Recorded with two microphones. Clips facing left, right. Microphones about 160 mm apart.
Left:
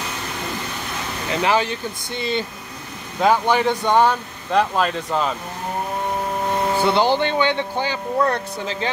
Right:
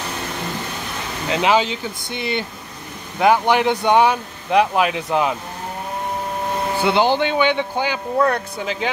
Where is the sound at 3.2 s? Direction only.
10° right (ahead or behind).